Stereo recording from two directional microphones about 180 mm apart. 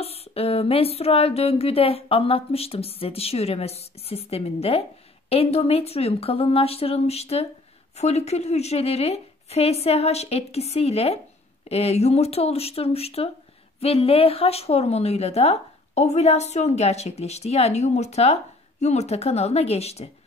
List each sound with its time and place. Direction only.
0.0 s speech: 35° left (ahead or behind)